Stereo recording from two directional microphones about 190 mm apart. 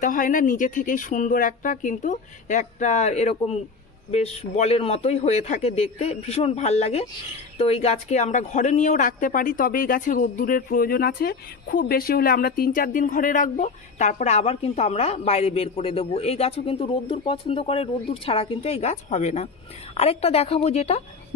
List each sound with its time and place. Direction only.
0.0 s a woman's voice: 45° left (ahead or behind)